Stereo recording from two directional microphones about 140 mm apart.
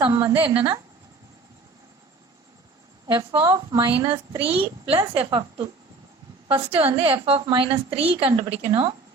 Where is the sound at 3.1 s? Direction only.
30° right (ahead or behind).